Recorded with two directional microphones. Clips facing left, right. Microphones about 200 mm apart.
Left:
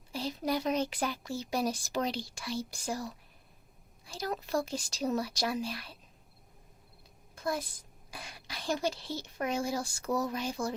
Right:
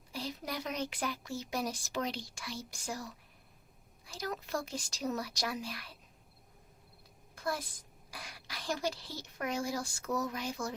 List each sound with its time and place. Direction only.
0.1 s speech: 30° left (ahead or behind)
4.1 s speech: 30° left (ahead or behind)
7.3 s a sound: 20° left (ahead or behind)
8.1 s speech: 25° left (ahead or behind)